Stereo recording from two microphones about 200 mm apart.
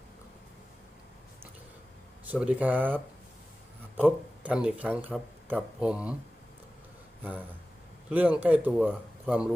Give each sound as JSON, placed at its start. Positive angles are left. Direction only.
{"t": 2.2, "sound": "speech", "side_deg": -5}
{"t": 8.1, "sound": "speech", "side_deg": -10}